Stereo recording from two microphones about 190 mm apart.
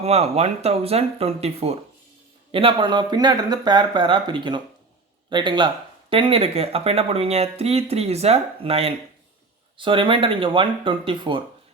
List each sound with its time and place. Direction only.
0.0 s speech: 35° right (ahead or behind)